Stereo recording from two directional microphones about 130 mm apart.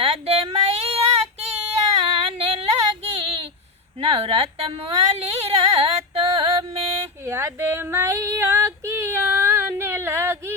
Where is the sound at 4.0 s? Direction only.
45° right (ahead or behind).